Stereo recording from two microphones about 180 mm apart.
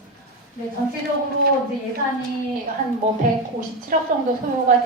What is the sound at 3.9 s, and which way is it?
Speech, 50° right (ahead or behind).